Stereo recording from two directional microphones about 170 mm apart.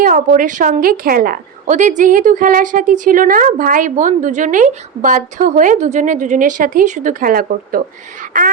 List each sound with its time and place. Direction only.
0.0 s a woman's voice: 55° right (ahead or behind)
1.6 s a woman's voice: 45° right (ahead or behind)